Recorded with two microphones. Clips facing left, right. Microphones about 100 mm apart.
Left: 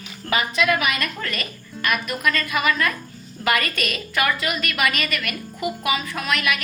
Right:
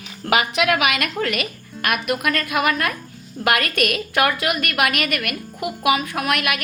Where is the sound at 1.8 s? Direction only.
60° right (ahead or behind).